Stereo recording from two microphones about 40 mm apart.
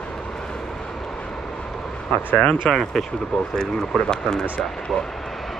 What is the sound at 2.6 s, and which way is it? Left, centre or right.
Speech, centre.